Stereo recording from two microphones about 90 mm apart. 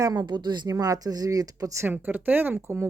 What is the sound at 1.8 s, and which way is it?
Speech, 20° right (ahead or behind).